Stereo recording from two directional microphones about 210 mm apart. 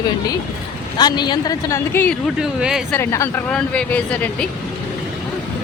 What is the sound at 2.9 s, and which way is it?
Speech, 15° left (ahead or behind).